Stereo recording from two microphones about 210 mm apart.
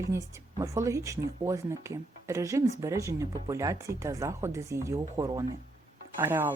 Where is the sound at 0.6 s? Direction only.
15° right (ahead or behind).